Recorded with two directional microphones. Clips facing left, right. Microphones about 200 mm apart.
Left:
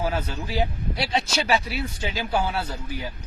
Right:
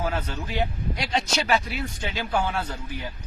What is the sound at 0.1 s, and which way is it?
Speech, 10° left (ahead or behind).